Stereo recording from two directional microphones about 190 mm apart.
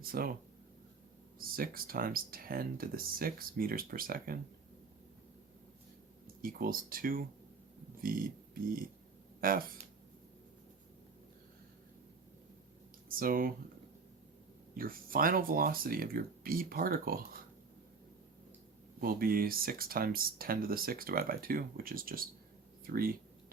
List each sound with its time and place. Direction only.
0.0 s speech: 50° right (ahead or behind)
1.4 s speech: 50° right (ahead or behind)
6.4 s speech: 50° right (ahead or behind)
9.4 s speech: 50° right (ahead or behind)
13.1 s speech: 50° right (ahead or behind)
14.8 s speech: 50° right (ahead or behind)
18.9 s speech: 50° right (ahead or behind)